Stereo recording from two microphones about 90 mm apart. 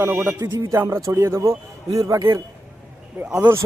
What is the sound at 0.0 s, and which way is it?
Speech, 25° right (ahead or behind).